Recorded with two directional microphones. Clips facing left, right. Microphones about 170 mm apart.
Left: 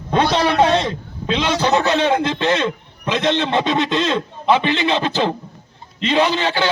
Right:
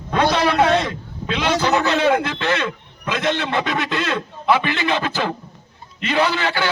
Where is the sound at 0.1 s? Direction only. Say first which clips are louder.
Left 1 dB; 25° left (ahead or behind).